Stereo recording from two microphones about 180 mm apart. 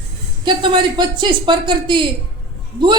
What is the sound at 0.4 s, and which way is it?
Speech, 25° right (ahead or behind).